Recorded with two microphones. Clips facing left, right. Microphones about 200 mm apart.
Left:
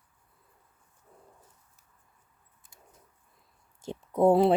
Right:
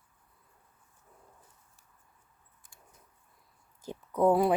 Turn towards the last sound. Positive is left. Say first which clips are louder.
# left 3 dB
turn(degrees=25)  # may be behind; listen again after turning